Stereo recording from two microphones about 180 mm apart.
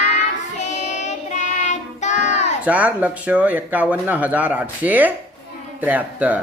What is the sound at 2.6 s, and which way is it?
Speech, 10° right (ahead or behind).